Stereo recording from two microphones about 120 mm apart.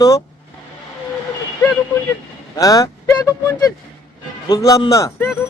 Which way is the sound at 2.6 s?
30° left (ahead or behind).